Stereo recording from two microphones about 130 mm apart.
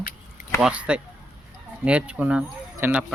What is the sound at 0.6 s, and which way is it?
Speech, 10° right (ahead or behind).